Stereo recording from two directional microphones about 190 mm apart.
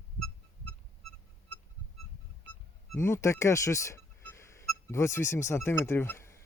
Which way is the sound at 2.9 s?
15° left (ahead or behind).